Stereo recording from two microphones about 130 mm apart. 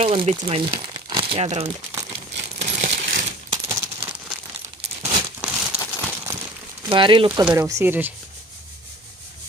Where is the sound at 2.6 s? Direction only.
75° right (ahead or behind); by 3.3 s 90° right.